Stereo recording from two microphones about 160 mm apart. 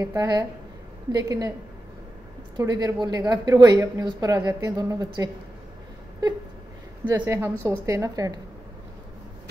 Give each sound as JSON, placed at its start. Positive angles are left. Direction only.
{"t": 0.0, "sound": "a woman's voice", "side_deg": -20}
{"t": 2.5, "sound": "a woman's voice", "side_deg": -25}
{"t": 7.1, "sound": "a woman's voice", "side_deg": -15}